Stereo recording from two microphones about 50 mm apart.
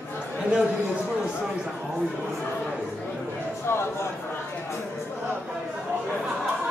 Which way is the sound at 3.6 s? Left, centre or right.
Left.